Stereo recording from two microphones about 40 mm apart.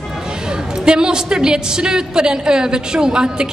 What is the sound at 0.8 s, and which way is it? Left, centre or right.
A woman's voice, centre.